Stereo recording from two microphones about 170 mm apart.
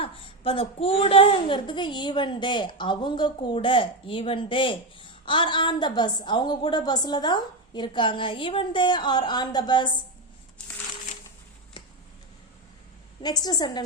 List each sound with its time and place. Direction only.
0.0 s a woman's voice: 30° left (ahead or behind)
13.2 s a woman's voice: 25° left (ahead or behind)